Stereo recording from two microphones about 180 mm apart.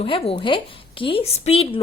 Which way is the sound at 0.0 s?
30° left (ahead or behind).